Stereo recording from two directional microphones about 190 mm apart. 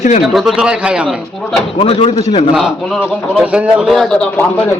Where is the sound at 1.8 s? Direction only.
30° left (ahead or behind).